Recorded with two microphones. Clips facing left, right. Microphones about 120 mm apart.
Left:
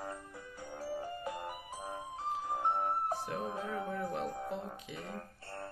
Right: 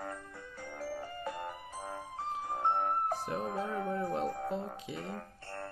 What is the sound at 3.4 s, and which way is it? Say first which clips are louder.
Speech: right 3 dB; 35° right (ahead or behind).